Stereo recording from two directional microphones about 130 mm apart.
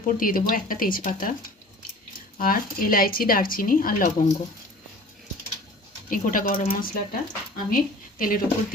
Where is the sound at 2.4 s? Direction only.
90° left.